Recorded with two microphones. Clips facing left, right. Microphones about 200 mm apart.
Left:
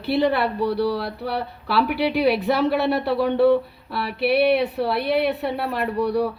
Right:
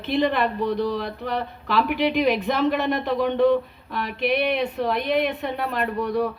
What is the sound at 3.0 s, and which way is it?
A woman's voice, 10° left (ahead or behind).